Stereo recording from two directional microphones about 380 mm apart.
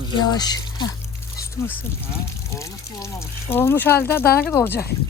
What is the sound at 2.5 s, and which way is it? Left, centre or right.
Speech, centre.